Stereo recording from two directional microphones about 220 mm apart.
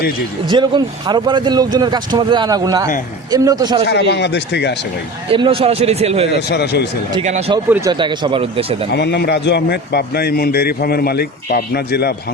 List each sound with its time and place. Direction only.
0.5 s speech: 20° right (ahead or behind)
3.8 s a man's voice: 50° left (ahead or behind)
5.3 s speech: 25° right (ahead or behind)
6.5 s a man's voice: 50° left (ahead or behind)
7.3 s speech: 30° right (ahead or behind)
7.7 s speech: 15° right (ahead or behind)
8.9 s a man's voice: 50° left (ahead or behind)